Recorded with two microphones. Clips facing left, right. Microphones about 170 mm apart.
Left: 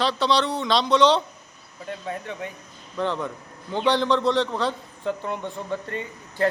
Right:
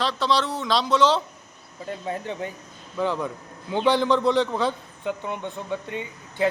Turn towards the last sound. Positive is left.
turn(degrees=-5)  # may be behind; listen again after turning